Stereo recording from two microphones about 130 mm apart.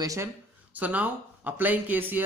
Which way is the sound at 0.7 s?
10° right (ahead or behind).